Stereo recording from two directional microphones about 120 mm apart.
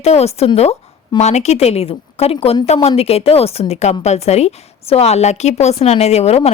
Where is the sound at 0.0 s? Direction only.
60° left (ahead or behind).